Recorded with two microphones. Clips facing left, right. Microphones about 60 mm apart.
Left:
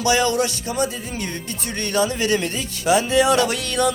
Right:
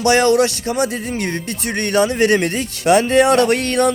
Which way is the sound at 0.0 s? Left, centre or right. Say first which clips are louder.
Right 6 dB; right.